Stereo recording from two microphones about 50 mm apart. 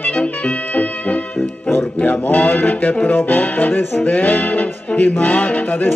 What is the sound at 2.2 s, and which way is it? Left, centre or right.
Music, left.